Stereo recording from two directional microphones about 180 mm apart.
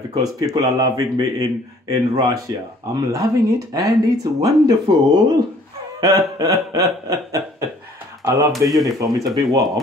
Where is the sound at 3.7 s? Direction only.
20° right (ahead or behind).